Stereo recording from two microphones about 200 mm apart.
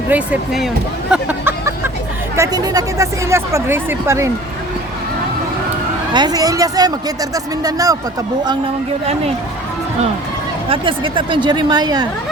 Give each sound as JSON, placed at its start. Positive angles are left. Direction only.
{"t": 0.1, "sound": "speech", "side_deg": -5}
{"t": 1.1, "sound": "vehicle", "side_deg": -10}
{"t": 2.3, "sound": "speech", "side_deg": -15}
{"t": 6.1, "sound": "speech", "side_deg": -20}
{"t": 10.7, "sound": "speech", "side_deg": -25}